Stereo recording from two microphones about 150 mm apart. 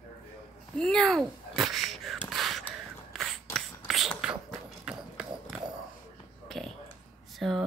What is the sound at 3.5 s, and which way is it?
Beatboxing, centre (ahead or behind).